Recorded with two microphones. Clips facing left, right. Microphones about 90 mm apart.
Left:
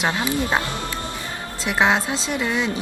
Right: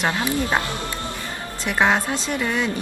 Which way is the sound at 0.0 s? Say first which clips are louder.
Even; 15° left (ahead or behind).